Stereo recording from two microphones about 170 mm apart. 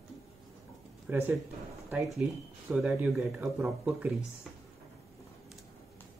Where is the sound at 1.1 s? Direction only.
15° right (ahead or behind).